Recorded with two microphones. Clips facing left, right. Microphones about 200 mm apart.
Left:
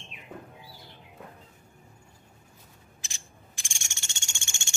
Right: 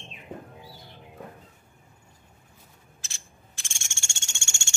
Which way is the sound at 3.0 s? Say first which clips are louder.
Left 1 dB; 15° left (ahead or behind).